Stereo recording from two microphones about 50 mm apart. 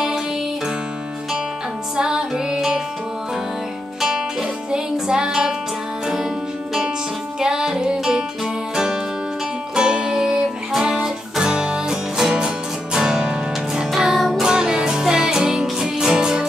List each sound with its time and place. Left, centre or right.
2.0 s music: centre
4.0 s music: centre
7.3 s music: centre
13.9 s music: centre
14.4 s music: centre